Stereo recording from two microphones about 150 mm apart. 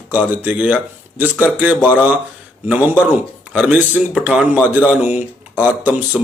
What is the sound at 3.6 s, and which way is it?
Speech, 10° right (ahead or behind).